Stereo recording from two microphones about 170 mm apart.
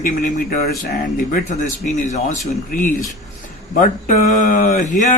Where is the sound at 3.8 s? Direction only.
50° left (ahead or behind).